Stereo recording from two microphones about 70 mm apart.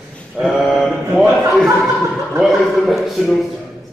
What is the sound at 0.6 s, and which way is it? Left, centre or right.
A man's voice, centre.